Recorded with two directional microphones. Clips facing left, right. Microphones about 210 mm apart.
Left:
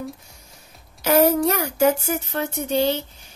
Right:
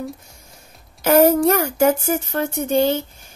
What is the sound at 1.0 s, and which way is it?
A woman's voice, 50° right (ahead or behind).